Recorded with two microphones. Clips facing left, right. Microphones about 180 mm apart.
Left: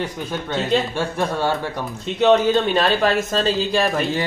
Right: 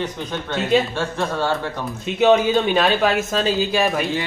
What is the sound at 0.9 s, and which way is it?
Speech, 15° left (ahead or behind).